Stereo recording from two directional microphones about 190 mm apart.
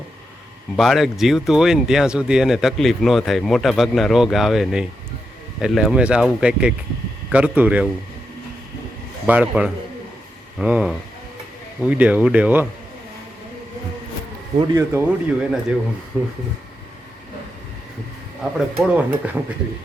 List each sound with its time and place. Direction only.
0.8 s speech: centre (ahead or behind)
9.2 s speech: 5° right (ahead or behind)
14.6 s speech: 20° right (ahead or behind)
14.9 s speech: 5° right (ahead or behind)
18.5 s speech: 5° right (ahead or behind)